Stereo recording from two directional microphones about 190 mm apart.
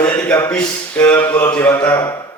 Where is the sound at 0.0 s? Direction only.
10° left (ahead or behind).